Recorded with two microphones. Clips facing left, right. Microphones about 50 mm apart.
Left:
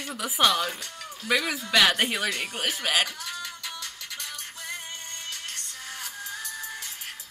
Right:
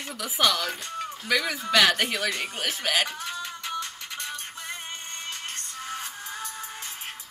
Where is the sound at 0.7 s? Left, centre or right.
Right.